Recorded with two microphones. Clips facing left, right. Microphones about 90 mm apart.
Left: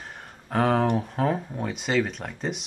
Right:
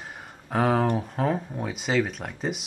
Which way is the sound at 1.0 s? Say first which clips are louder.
Left 1 dB; centre (ahead or behind).